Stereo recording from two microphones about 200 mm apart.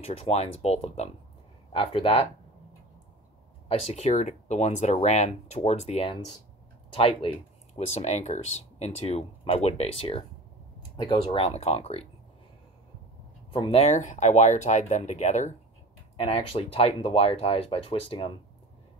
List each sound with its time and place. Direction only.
0.0 s speech: 30° left (ahead or behind)
3.6 s speech: 30° left (ahead or behind)
13.5 s speech: 30° left (ahead or behind)